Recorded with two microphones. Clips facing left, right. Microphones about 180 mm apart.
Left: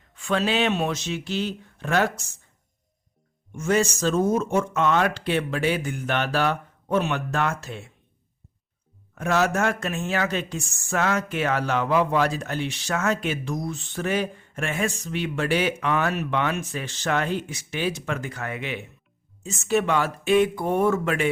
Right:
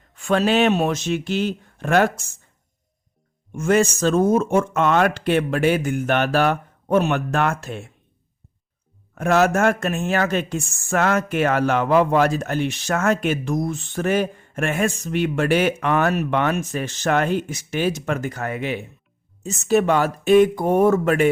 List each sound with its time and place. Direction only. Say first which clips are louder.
0.2 s speech: right 5 dB; 45° right (ahead or behind)
3.5 s speech: right 4 dB; 55° right (ahead or behind)
9.1 s speech: right 5 dB; 50° right (ahead or behind)